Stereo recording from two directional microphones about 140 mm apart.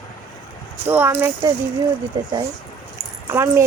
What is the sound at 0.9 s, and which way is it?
Speech, 15° right (ahead or behind).